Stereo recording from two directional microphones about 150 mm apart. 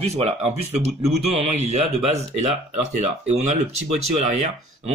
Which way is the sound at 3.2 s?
50° right (ahead or behind).